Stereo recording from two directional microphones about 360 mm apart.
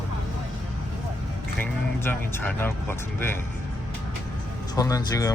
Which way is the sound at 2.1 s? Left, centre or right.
Centre.